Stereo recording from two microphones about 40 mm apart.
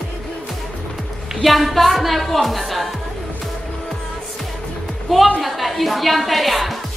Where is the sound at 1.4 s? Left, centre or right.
Centre.